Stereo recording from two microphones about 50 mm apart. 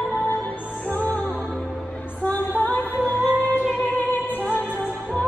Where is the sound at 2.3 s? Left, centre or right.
Left.